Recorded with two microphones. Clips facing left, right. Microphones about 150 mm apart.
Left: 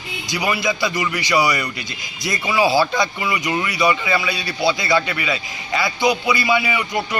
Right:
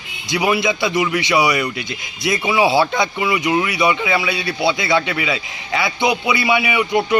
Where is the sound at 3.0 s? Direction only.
10° right (ahead or behind).